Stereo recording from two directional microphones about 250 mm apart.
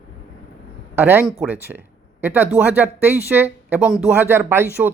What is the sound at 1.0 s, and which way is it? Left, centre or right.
Speech, centre.